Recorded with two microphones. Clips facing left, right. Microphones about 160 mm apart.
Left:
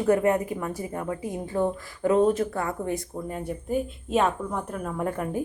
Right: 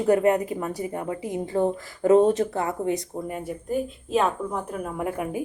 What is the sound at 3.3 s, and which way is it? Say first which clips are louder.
A woman's voice: left 1 dB; 5° right (ahead or behind).